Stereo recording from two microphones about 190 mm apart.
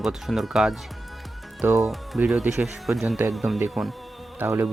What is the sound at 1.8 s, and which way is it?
Speech, centre (ahead or behind).